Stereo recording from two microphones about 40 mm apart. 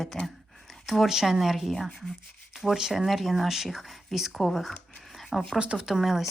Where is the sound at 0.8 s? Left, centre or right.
Centre.